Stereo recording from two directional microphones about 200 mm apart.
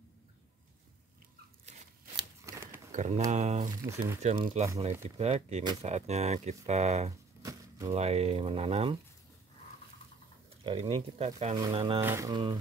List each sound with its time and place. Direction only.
2.4 s a sound: 15° right (ahead or behind)
2.9 s a sound: 35° right (ahead or behind)
3.3 s speech: 35° right (ahead or behind)
3.8 s speech: 15° right (ahead or behind)
4.2 s speech: 35° right (ahead or behind)
5.6 s speech: 20° right (ahead or behind)
5.9 s speech: 35° right (ahead or behind)
10.6 s speech: 25° right (ahead or behind)
12.0 s speech: 15° right (ahead or behind)